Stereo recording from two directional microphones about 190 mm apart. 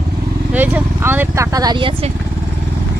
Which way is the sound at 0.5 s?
10° right (ahead or behind).